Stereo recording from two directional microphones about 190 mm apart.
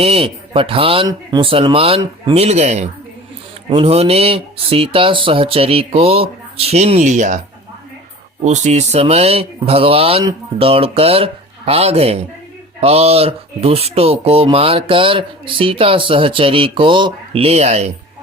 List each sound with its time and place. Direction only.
0.0 s speech: 30° right (ahead or behind)
8.4 s speech: 35° right (ahead or behind)